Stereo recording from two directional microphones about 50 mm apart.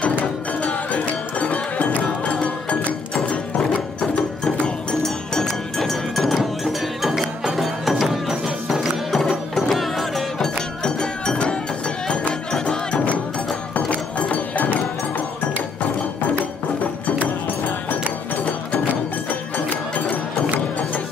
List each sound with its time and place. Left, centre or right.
0.2 s music: left
5.0 s music: centre
10.8 s music: centre; by 14.8 s left
19.5 s music: left